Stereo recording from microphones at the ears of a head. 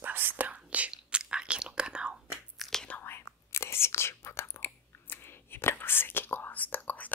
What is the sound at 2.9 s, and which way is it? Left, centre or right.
Whispering, left.